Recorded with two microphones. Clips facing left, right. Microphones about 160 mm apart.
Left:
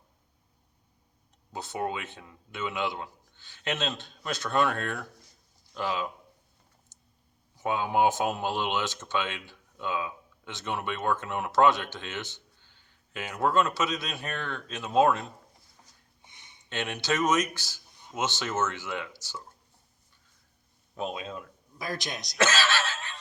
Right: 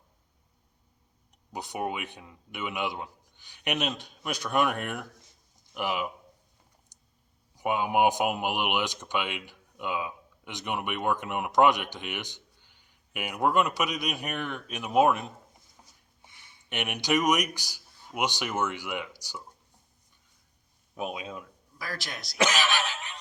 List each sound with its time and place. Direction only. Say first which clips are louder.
1.5 s speech: even; 15° right (ahead or behind)
6.9 s clicking: left 1 dB; 15° right (ahead or behind)
7.5 s speech: right 1 dB; 15° right (ahead or behind)
16.2 s a sound: even; 20° left (ahead or behind)
16.6 s speech: right 1 dB; 15° right (ahead or behind)
20.9 s speech: left 1 dB; 10° right (ahead or behind)
21.8 s a man's voice: left 3 dB; 20° left (ahead or behind)
22.4 s a sound: even; 15° right (ahead or behind)